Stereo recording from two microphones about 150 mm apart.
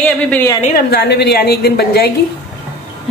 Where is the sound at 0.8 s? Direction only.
90° left.